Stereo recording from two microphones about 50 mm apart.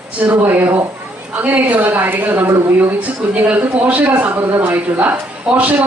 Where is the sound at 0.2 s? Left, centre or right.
Right.